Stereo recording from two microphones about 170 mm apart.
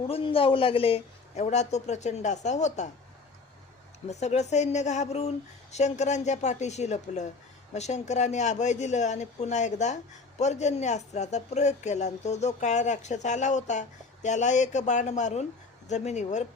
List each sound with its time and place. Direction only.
0.1 s a man's voice: 30° left (ahead or behind)
4.1 s a man's voice: 40° left (ahead or behind)